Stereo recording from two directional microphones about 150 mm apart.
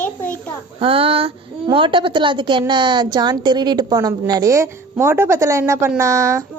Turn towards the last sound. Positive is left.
turn(degrees=-20)  # may be behind; listen again after turning